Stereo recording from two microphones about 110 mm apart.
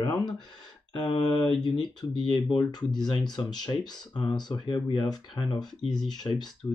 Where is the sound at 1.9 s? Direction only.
40° left (ahead or behind).